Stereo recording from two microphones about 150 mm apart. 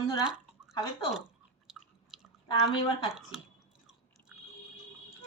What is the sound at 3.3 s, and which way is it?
Drip, 5° right (ahead or behind).